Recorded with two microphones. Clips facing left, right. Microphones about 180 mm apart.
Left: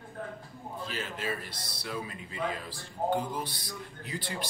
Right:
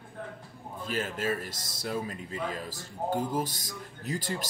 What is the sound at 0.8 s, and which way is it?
Speech, 50° right (ahead or behind).